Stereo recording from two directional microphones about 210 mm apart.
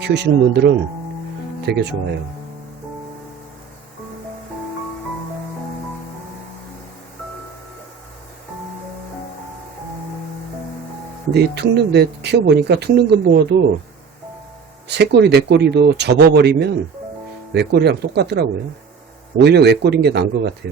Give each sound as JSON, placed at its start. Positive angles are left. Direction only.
{"t": 0.0, "sound": "speech", "side_deg": -55}
{"t": 11.3, "sound": "speech", "side_deg": -50}
{"t": 14.8, "sound": "speech", "side_deg": -55}